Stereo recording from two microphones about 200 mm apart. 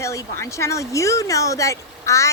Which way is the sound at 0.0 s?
15° left (ahead or behind).